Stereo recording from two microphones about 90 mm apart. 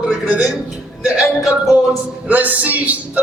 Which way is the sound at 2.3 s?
20° right (ahead or behind).